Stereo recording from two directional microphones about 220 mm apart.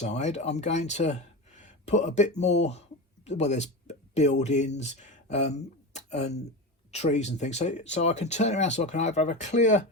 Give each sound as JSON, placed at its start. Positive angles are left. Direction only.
{"t": 0.0, "sound": "speech", "side_deg": 30}